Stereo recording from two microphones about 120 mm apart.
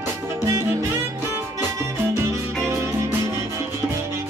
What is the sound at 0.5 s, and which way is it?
Music, 20° right (ahead or behind).